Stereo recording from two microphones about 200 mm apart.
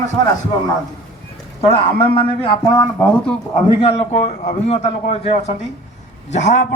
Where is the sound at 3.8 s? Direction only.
30° left (ahead or behind).